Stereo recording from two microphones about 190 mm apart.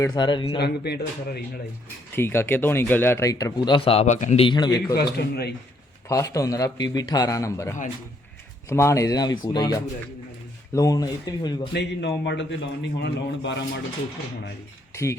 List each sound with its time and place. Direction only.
0.0 s speech: 25° left (ahead or behind)
0.6 s a man's voice: 60° left (ahead or behind)
2.1 s a man's voice: 10° left (ahead or behind)
3.8 s a man's voice: 30° left (ahead or behind)
4.9 s a man's voice: 60° left (ahead or behind)
6.1 s a man's voice: 15° left (ahead or behind)
11.7 s a man's voice: 65° left (ahead or behind)